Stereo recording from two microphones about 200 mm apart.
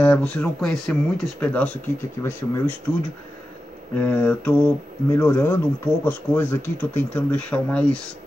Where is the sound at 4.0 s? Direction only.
5° left (ahead or behind).